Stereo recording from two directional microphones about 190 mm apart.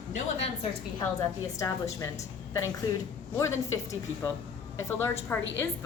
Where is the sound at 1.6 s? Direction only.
15° left (ahead or behind).